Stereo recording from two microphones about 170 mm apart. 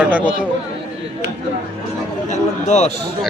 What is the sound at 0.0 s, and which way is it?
Speech, 10° right (ahead or behind).